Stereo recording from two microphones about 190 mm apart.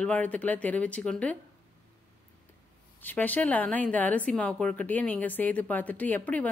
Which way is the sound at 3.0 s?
10° left (ahead or behind).